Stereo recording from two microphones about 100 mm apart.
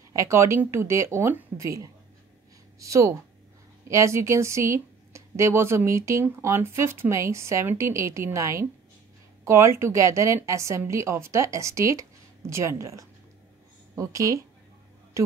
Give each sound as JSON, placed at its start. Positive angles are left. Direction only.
{"t": 0.1, "sound": "a woman's voice", "side_deg": -30}